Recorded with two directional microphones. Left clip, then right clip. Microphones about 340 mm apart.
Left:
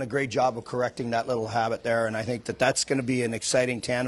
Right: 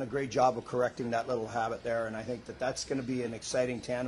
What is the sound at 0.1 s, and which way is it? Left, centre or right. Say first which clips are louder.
Speech: left 3 dB; left.